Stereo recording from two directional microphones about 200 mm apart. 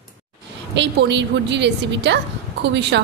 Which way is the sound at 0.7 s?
60° right (ahead or behind).